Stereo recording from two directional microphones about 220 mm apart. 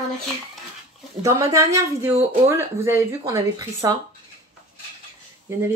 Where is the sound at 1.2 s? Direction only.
15° right (ahead or behind).